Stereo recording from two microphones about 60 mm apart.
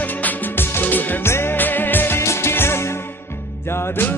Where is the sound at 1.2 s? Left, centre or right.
Left.